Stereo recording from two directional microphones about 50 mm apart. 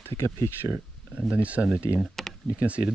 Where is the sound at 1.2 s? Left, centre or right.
Right.